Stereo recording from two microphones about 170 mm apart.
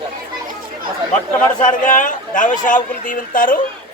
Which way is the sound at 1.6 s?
50° left (ahead or behind).